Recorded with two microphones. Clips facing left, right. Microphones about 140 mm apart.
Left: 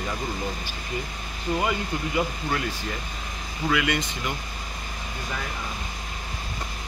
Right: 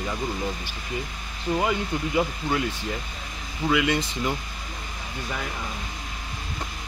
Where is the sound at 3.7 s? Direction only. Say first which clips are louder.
Right 2 dB; 25° right (ahead or behind).